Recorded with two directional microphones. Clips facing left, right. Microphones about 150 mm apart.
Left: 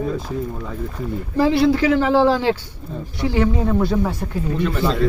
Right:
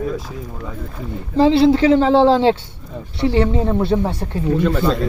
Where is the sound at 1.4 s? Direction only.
25° right (ahead or behind).